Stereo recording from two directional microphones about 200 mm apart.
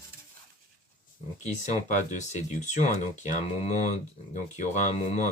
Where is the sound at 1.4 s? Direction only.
35° left (ahead or behind).